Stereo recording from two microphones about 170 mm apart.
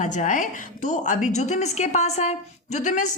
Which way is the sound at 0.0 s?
45° left (ahead or behind).